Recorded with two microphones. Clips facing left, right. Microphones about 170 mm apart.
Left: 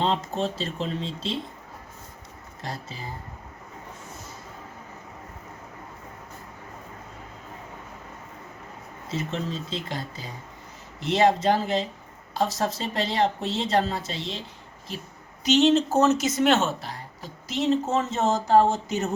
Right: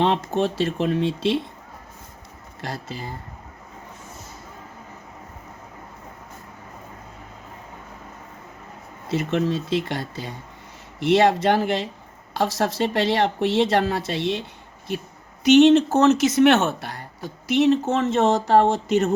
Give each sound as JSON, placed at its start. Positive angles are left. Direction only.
{"t": 0.0, "sound": "speech", "side_deg": -65}
{"t": 2.6, "sound": "speech", "side_deg": -75}
{"t": 9.0, "sound": "speech", "side_deg": -70}
{"t": 15.4, "sound": "speech", "side_deg": -60}